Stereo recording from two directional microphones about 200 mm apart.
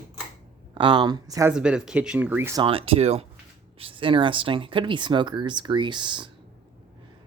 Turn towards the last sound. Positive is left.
turn(degrees=-25)  # may be behind; listen again after turning